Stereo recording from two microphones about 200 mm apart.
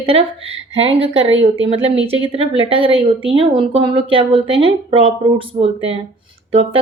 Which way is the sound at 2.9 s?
25° left (ahead or behind).